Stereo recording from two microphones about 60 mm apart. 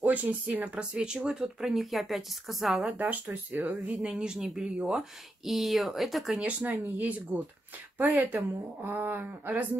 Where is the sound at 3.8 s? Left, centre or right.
Centre.